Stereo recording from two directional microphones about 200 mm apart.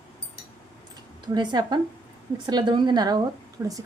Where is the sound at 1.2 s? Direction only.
20° right (ahead or behind).